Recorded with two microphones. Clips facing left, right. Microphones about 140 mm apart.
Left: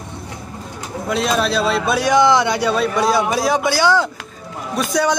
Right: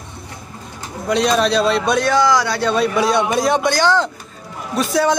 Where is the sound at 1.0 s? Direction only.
Centre (ahead or behind).